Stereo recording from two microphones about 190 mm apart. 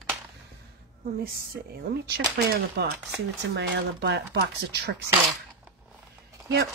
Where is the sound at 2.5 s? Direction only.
60° right (ahead or behind).